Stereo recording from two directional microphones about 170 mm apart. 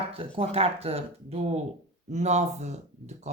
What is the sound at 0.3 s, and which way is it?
Speech, 35° right (ahead or behind).